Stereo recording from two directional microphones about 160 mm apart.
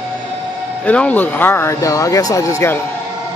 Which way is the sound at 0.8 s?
10° left (ahead or behind).